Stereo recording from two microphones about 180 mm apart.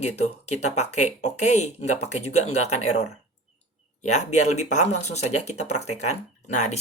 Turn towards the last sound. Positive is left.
turn(degrees=40)  # may be behind; listen again after turning